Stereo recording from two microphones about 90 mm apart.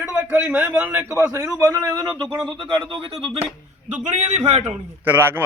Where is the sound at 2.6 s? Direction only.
65° right (ahead or behind).